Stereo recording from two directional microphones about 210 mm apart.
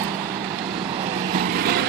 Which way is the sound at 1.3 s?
50° right (ahead or behind).